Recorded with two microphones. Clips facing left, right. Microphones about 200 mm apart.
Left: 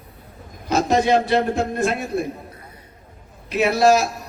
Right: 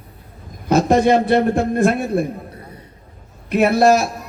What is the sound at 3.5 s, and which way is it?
Speech, 55° right (ahead or behind).